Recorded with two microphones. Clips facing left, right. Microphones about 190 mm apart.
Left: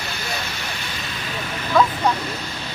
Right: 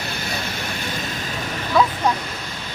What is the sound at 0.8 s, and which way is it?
Vehicle, 50° right (ahead or behind).